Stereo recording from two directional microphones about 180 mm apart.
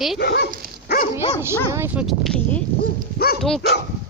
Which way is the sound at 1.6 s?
15° right (ahead or behind).